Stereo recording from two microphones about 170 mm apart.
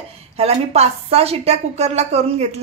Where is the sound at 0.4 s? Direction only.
35° right (ahead or behind).